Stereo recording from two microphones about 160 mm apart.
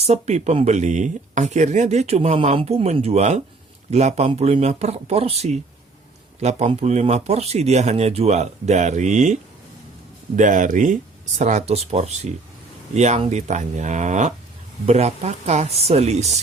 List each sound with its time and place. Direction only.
0.0 s speech: 45° right (ahead or behind)